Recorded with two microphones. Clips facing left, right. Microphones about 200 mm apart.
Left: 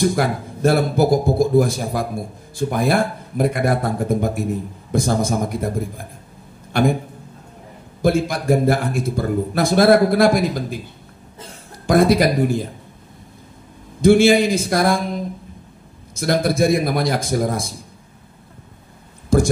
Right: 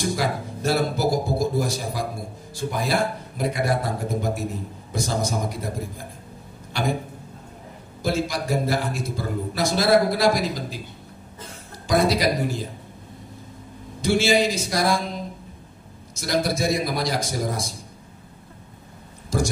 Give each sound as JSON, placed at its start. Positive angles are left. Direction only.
{"t": 0.0, "sound": "a man's voice", "side_deg": 55}
{"t": 6.7, "sound": "a man's voice", "side_deg": 55}
{"t": 8.0, "sound": "a man's voice", "side_deg": 55}
{"t": 11.8, "sound": "a man's voice", "side_deg": 55}
{"t": 14.0, "sound": "a man's voice", "side_deg": 55}
{"t": 16.2, "sound": "a man's voice", "side_deg": 55}
{"t": 19.3, "sound": "speech", "side_deg": 55}